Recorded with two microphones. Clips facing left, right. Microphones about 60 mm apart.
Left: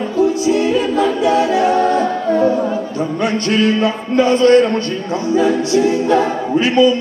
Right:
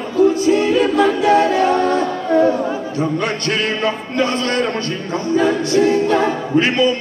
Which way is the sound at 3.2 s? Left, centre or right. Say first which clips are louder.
Left 4 dB; right.